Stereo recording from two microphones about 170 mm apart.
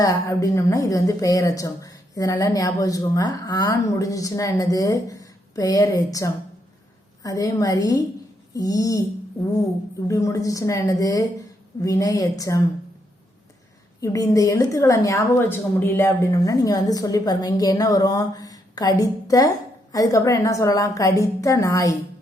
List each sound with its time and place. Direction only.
0.0 s a woman's voice: 20° left (ahead or behind)
10.1 s a woman's voice: 20° left (ahead or behind)
14.0 s a woman's voice: 20° left (ahead or behind)